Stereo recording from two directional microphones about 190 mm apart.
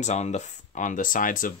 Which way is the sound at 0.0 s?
35° left (ahead or behind).